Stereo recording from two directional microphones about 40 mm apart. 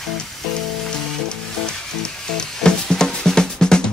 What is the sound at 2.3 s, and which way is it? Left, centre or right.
Music, centre.